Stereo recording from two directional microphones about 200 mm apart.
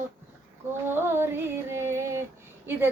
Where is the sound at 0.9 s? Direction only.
10° right (ahead or behind).